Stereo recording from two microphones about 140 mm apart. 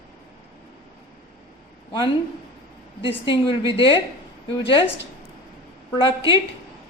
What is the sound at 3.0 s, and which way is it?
A woman's voice, 40° left (ahead or behind).